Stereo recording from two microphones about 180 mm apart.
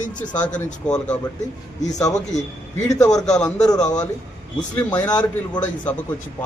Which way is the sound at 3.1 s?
5° left (ahead or behind).